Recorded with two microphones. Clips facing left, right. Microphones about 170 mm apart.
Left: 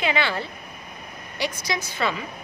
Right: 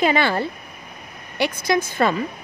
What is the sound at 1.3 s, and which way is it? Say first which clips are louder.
Speech: right 8 dB; 60° right (ahead or behind).